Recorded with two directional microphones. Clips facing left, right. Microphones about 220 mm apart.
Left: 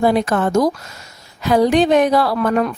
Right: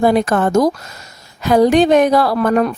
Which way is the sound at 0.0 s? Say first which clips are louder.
Right 2 dB; 45° right (ahead or behind).